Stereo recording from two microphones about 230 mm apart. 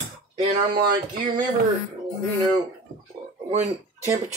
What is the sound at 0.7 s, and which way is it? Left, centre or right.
Speech, right.